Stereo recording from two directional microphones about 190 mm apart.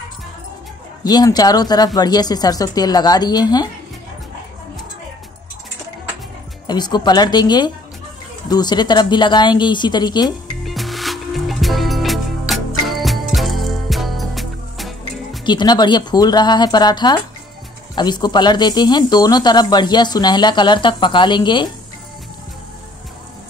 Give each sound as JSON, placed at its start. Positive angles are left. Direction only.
{"t": 1.0, "sound": "speech", "side_deg": 20}
{"t": 6.7, "sound": "speech", "side_deg": 20}
{"t": 10.6, "sound": "music", "side_deg": 0}
{"t": 15.4, "sound": "speech", "side_deg": 25}